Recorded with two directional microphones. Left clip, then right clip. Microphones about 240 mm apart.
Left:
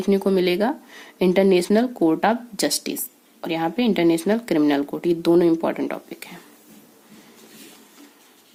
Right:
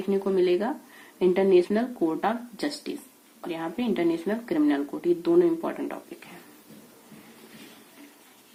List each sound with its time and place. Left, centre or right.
0.0 s speech: left